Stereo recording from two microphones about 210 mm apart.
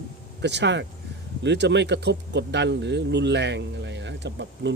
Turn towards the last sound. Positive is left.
turn(degrees=-55)  # may be behind; listen again after turning